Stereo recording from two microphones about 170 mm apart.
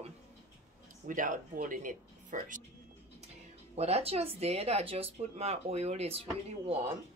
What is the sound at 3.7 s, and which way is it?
Speech, 40° right (ahead or behind).